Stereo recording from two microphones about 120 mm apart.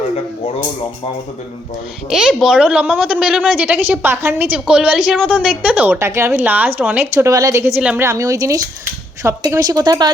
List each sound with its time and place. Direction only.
2.0 s speech: 5° right (ahead or behind)
4.6 s speech: 10° right (ahead or behind)
7.8 s speech: 10° right (ahead or behind)
8.0 s a woman's voice: 25° right (ahead or behind)